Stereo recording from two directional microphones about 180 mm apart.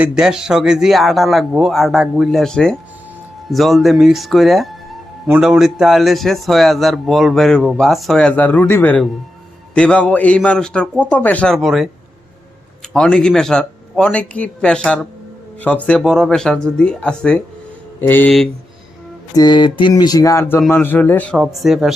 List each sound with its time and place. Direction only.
0.0 s speech: 5° right (ahead or behind)
12.9 s a man's voice: 5° left (ahead or behind)
19.4 s a man's voice: 25° left (ahead or behind); by 21.9 s centre (ahead or behind)